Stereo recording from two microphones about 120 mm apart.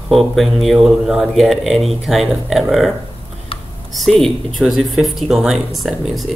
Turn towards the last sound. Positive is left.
turn(degrees=0)  # may be behind; listen again after turning